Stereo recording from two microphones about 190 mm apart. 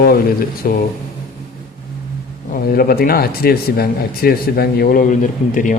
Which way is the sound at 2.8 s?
50° left (ahead or behind).